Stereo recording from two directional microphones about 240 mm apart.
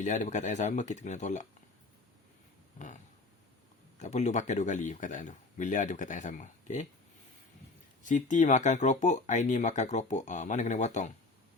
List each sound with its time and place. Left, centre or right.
0.0 s speech: left
2.7 s a sound: left
3.9 s speech: left
8.0 s speech: left